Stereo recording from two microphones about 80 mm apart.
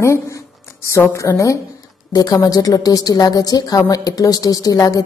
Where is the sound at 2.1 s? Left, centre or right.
Left.